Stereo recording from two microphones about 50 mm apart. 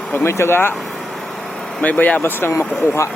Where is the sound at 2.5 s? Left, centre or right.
Left.